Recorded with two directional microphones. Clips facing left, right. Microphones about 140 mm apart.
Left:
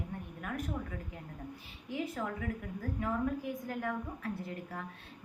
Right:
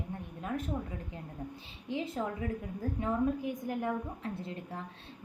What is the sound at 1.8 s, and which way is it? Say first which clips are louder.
A woman's voice: right 2 dB; 25° right (ahead or behind).